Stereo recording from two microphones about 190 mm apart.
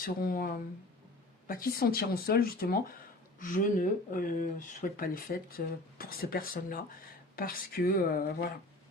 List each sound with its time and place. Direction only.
0.0 s speech: 50° left (ahead or behind)